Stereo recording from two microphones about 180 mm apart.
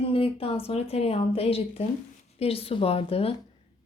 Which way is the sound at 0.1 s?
30° left (ahead or behind).